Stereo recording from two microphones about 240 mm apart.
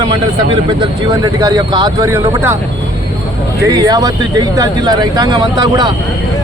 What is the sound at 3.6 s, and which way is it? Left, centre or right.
Speech, centre.